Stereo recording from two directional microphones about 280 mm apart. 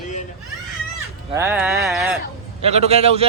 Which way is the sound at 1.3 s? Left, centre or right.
Centre.